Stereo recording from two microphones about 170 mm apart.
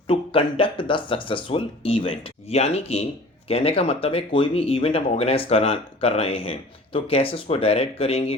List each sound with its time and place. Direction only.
0.1 s speech: 35° left (ahead or behind)